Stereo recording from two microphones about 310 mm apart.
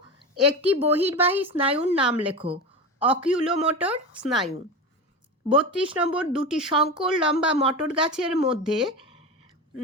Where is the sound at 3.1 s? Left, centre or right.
Centre.